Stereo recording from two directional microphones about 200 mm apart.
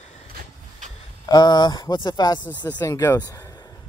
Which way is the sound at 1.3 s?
20° left (ahead or behind).